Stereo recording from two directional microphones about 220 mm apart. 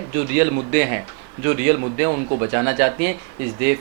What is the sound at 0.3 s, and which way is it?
Speech, 15° right (ahead or behind).